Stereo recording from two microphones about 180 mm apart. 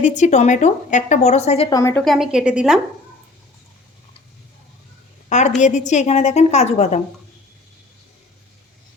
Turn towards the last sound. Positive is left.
turn(degrees=40)  # may be behind; listen again after turning